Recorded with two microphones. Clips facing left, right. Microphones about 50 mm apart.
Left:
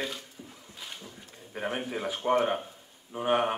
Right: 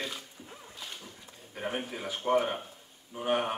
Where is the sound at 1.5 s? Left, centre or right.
Centre.